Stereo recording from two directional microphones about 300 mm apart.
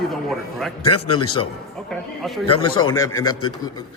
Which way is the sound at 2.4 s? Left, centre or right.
Centre.